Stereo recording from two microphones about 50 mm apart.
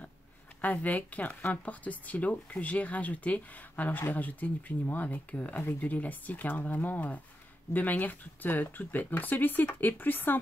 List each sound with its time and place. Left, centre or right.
0.6 s speech: left